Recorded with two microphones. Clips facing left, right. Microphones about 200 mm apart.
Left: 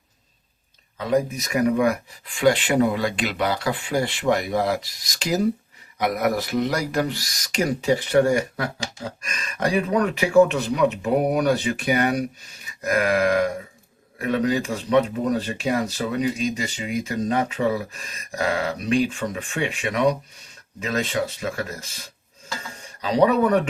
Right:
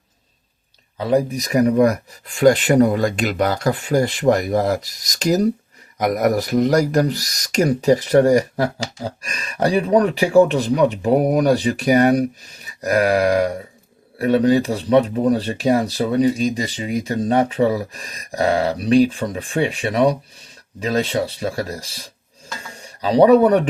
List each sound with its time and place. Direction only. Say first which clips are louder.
0.9 s speech: right 4 dB; 35° right (ahead or behind)
12.6 s grunt: right 5 dB; 35° right (ahead or behind)
14.2 s a man's voice: right 7 dB; 35° right (ahead or behind)